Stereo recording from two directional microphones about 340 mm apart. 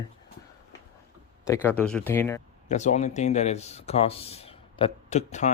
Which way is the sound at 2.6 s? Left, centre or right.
Left.